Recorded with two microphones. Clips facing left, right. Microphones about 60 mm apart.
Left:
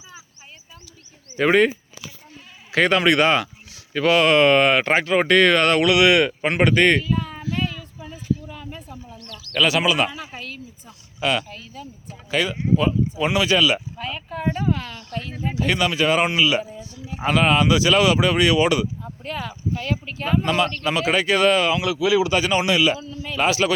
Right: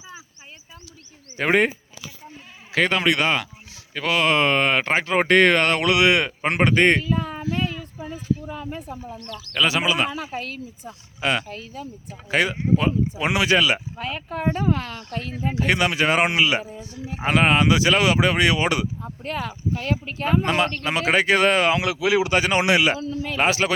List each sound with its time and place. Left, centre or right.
1.4 s speech: centre
2.7 s speech: centre
5.1 s speech: right
7.4 s a sound: right
8.1 s speech: right
9.5 s speech: right
10.1 s speech: right
15.6 s speech: right
16.0 s speech: right
17.2 s speech: right
23.0 s speech: right
23.4 s speech: right